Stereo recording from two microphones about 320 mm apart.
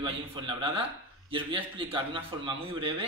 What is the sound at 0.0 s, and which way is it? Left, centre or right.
A man's voice, centre.